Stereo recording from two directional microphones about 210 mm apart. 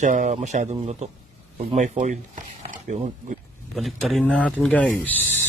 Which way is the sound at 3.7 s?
Centre (ahead or behind).